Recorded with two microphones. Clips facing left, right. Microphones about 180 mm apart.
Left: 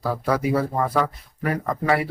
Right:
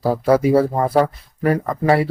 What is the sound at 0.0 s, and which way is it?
Speech, 30° right (ahead or behind).